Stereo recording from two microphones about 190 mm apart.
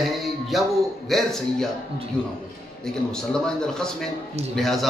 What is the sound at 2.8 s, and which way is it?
A man's voice, 5° left (ahead or behind).